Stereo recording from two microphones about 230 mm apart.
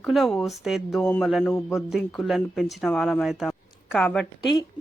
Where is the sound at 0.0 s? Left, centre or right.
Centre.